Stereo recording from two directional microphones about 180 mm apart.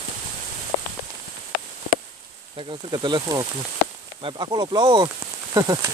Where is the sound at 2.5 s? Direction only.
30° right (ahead or behind).